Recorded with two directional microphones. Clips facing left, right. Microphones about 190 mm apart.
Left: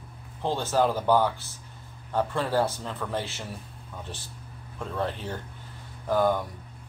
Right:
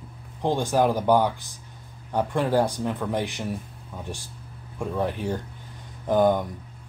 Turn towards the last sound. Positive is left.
turn(degrees=-20)  # may be behind; listen again after turning